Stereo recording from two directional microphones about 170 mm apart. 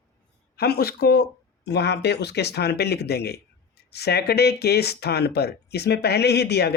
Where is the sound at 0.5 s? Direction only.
70° left (ahead or behind).